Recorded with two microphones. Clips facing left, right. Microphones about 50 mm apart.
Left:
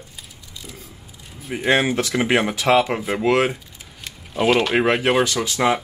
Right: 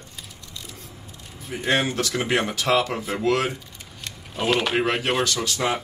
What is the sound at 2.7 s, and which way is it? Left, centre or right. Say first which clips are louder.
Speech: left 5 dB; left.